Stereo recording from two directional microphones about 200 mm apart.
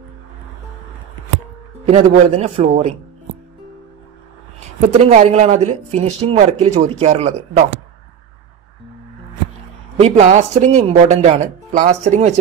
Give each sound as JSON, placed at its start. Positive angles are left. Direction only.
{"t": 1.9, "sound": "speech", "side_deg": -35}
{"t": 4.9, "sound": "speech", "side_deg": -35}
{"t": 9.9, "sound": "speech", "side_deg": -35}